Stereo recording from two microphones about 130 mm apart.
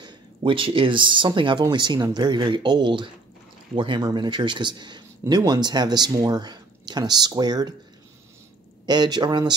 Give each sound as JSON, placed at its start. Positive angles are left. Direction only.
{"t": 0.0, "sound": "speech", "side_deg": -40}
{"t": 8.8, "sound": "speech", "side_deg": -35}